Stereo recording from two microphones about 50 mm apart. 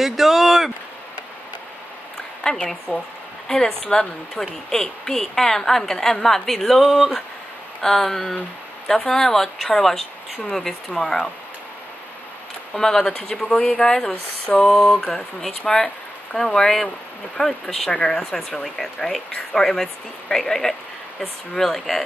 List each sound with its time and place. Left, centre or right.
0.0 s speech: centre
2.4 s speech: centre
12.7 s speech: centre